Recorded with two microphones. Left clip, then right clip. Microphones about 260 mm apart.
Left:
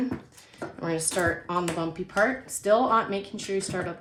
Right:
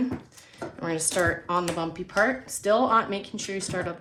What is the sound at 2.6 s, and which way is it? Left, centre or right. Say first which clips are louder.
Speech: even; right.